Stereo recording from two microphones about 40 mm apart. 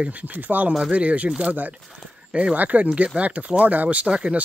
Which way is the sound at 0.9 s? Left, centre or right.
Right.